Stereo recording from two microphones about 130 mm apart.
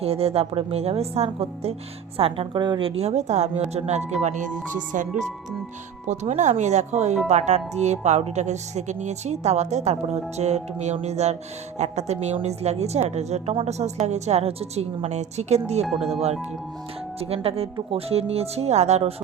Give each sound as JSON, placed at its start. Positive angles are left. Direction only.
{"t": 0.0, "sound": "a woman's voice", "side_deg": -50}
{"t": 6.1, "sound": "a woman's voice", "side_deg": -65}
{"t": 17.2, "sound": "a woman's voice", "side_deg": -50}